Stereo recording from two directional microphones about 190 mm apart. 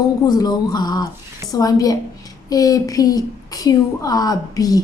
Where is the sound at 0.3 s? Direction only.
20° left (ahead or behind).